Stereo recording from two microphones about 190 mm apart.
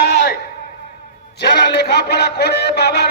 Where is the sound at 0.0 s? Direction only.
60° left (ahead or behind).